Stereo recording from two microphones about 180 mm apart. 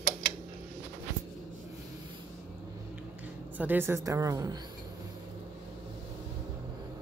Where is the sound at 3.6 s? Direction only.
10° right (ahead or behind).